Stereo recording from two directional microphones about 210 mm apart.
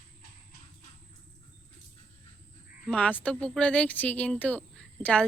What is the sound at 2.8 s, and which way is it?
Speech, 5° left (ahead or behind).